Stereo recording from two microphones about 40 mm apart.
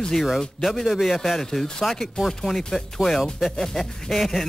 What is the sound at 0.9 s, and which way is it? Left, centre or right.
A man's voice, centre.